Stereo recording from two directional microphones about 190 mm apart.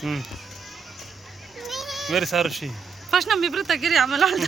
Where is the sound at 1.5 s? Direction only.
Centre (ahead or behind).